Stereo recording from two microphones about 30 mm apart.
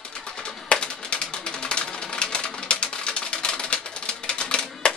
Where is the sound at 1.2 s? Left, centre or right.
Left.